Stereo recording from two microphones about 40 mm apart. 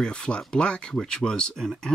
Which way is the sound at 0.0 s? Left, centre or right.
Left.